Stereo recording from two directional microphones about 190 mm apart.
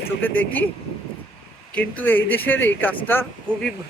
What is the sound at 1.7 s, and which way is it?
A man's voice, 10° left (ahead or behind).